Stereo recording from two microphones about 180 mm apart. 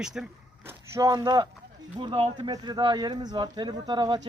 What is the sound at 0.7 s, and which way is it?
Speech, 15° right (ahead or behind).